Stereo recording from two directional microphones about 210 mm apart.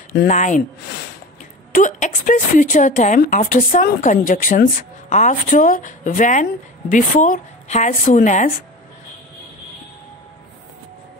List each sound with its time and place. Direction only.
0.3 s a woman's voice: 35° left (ahead or behind)
1.7 s a woman's voice: 35° left (ahead or behind)